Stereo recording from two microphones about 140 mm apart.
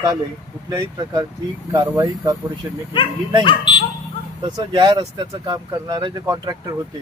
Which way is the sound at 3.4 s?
35° left (ahead or behind).